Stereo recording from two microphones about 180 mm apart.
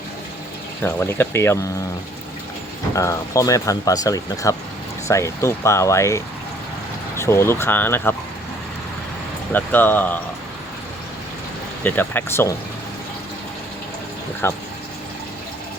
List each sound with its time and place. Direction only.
0.8 s speech: 10° left (ahead or behind)
2.9 s speech: 15° left (ahead or behind)
9.5 s speech: 10° left (ahead or behind)
11.8 s speech: 10° left (ahead or behind)
14.4 s speech: 15° left (ahead or behind)